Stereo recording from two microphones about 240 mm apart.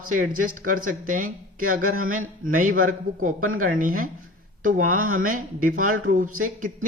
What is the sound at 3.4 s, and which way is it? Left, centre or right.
Speech, right.